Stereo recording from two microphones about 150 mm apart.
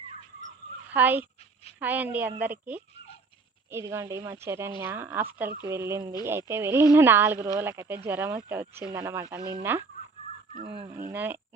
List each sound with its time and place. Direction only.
0.9 s speech: 10° right (ahead or behind)
10.5 s fowl: 25° left (ahead or behind)
11.1 s speech: 15° right (ahead or behind)